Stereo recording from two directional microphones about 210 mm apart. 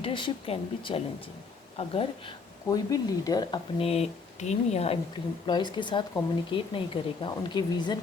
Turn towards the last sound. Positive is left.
turn(degrees=20)  # may be behind; listen again after turning